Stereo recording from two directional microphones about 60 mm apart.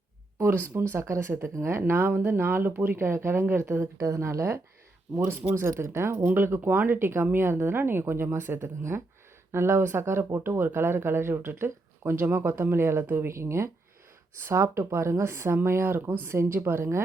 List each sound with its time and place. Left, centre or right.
0.4 s speech: right
3.9 s speech: right
5.3 s speech: right